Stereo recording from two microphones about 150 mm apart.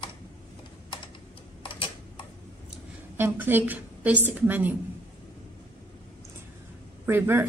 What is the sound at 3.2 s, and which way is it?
A woman's voice, 15° right (ahead or behind).